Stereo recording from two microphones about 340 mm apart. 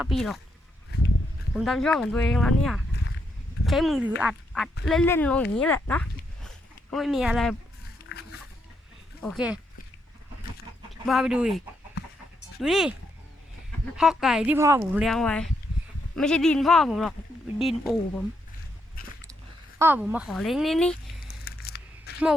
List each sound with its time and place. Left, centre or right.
0.0 s speech: centre
1.5 s speech: centre
9.2 s speech: centre
11.0 s speech: centre
12.0 s chicken: left
12.6 s speech: centre
13.9 s speech: centre
19.0 s biting: left
19.8 s speech: centre
21.2 s a sound: left